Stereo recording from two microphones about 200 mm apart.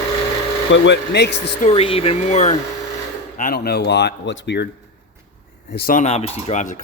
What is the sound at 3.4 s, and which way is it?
A man's voice, 45° left (ahead or behind).